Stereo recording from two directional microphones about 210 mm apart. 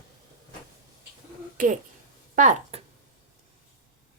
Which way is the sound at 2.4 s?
35° right (ahead or behind).